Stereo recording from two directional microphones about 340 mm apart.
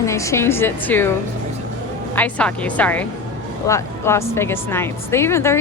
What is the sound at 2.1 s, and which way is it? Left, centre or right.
A woman's voice, centre.